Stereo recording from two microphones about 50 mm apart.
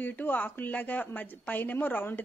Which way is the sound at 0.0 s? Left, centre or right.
Left.